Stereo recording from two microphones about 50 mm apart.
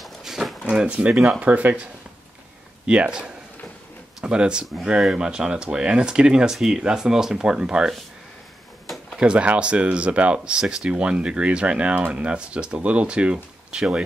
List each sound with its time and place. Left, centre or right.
0.0 s a sound: centre
0.7 s speech: right
2.9 s speech: centre
8.8 s drawer open or close: centre
9.2 s speech: right